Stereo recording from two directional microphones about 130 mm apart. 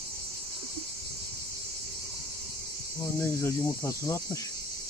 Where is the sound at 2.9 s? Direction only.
20° left (ahead or behind).